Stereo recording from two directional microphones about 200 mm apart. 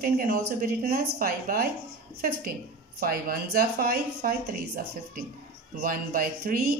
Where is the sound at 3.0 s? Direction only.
50° right (ahead or behind).